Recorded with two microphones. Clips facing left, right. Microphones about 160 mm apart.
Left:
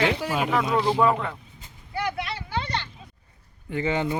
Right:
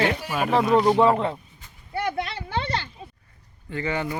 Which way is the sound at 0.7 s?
25° right (ahead or behind).